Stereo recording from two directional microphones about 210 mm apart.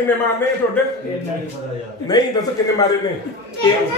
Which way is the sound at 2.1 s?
20° left (ahead or behind).